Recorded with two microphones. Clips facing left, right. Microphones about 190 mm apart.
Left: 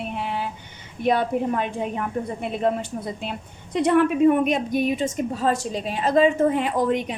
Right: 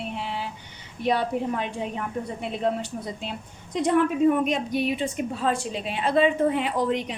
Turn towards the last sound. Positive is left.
turn(degrees=50)  # may be behind; listen again after turning